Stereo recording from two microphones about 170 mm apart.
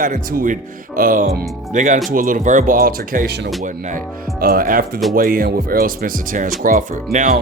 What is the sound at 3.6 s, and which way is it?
Speech, 50° right (ahead or behind).